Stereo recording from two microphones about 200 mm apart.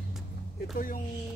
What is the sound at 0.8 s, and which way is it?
Speech, 45° left (ahead or behind).